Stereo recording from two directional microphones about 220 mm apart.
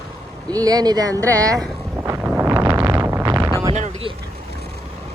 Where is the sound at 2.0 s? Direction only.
10° right (ahead or behind).